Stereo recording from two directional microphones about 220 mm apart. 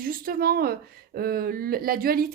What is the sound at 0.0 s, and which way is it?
Speech, 40° right (ahead or behind).